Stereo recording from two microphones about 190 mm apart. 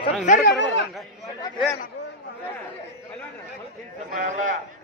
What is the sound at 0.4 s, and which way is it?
Speech, 65° left (ahead or behind).